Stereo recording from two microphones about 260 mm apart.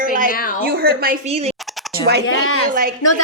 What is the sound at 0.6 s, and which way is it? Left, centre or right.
Speech, right.